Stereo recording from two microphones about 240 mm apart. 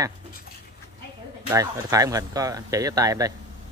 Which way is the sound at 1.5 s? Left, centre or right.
Centre.